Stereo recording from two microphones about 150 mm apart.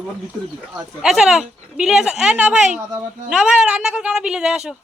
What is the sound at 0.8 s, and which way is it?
Speech, 5° right (ahead or behind).